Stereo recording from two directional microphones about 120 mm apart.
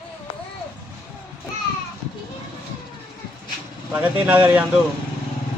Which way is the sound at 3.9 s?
15° right (ahead or behind).